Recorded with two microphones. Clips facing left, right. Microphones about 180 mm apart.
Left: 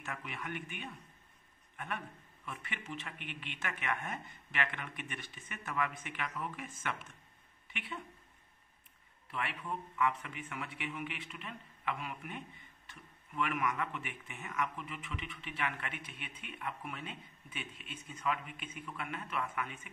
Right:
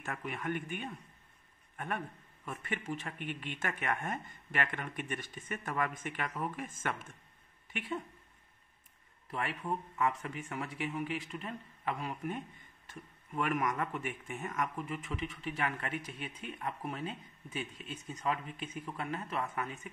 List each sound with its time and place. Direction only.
0.0 s a man's voice: 45° right (ahead or behind)
9.3 s speech: 40° right (ahead or behind)